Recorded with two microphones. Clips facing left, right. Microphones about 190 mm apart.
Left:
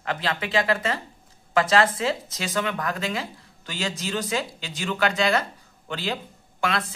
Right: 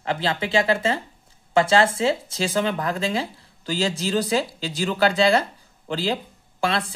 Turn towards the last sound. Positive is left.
turn(degrees=-30)  # may be behind; listen again after turning